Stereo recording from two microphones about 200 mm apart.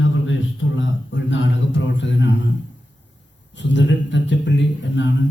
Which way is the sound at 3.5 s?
65° left (ahead or behind).